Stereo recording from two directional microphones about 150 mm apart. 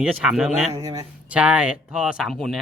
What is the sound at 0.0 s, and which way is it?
Speech, 5° right (ahead or behind).